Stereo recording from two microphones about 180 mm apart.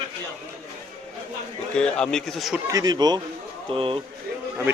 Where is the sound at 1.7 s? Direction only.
5° left (ahead or behind).